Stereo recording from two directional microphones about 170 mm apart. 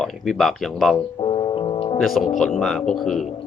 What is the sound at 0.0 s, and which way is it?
Speech, centre (ahead or behind).